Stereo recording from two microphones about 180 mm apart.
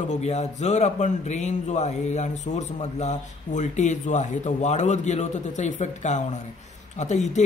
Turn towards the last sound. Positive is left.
turn(degrees=40)  # may be behind; listen again after turning